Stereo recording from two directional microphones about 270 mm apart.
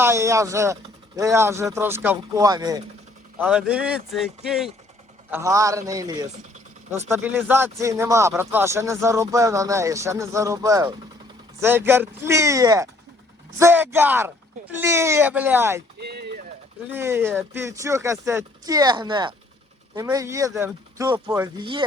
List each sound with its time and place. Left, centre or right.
0.0 s speech: centre
16.0 s a sound: right
16.9 s speech: centre